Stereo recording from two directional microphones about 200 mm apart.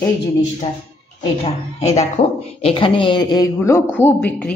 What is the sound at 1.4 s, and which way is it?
A man's voice, 30° left (ahead or behind).